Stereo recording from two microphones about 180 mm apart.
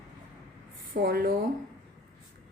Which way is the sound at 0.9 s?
55° right (ahead or behind).